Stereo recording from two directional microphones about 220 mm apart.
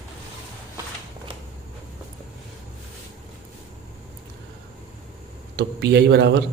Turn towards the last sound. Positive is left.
turn(degrees=-50)  # may be behind; listen again after turning